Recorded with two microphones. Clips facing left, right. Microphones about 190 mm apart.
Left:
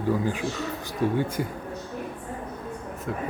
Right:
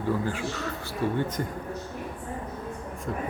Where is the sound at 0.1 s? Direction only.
15° left (ahead or behind).